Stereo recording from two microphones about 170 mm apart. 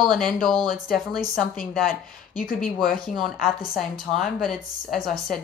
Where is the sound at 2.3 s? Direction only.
55° left (ahead or behind).